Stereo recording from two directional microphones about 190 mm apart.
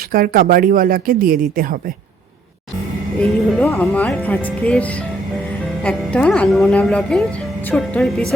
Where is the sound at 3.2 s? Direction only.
5° left (ahead or behind).